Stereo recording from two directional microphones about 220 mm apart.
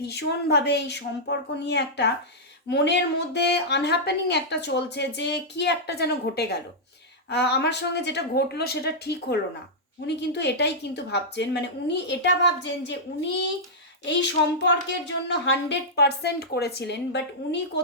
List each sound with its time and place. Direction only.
0.0 s a woman's voice: 50° left (ahead or behind)